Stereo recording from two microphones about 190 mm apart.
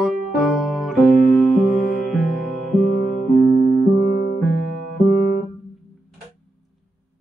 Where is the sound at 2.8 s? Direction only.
50° left (ahead or behind).